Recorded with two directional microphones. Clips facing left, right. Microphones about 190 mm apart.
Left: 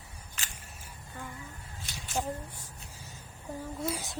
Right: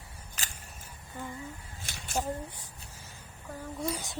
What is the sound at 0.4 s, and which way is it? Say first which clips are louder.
Single-lens reflex camera: right 3 dB; 35° right (ahead or behind).